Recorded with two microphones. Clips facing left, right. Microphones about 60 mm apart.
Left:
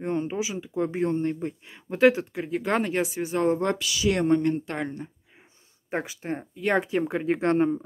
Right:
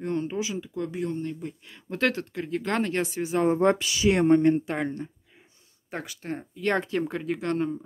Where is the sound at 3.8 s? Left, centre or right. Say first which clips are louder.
Right 2 dB; right.